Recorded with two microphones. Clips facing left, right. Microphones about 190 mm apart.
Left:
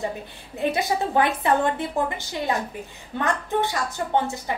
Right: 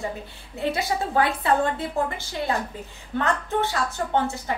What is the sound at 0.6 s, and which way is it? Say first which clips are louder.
A woman's voice: left 2 dB; 20° left (ahead or behind).